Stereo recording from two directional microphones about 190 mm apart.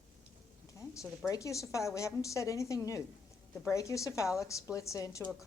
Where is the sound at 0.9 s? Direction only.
15° left (ahead or behind).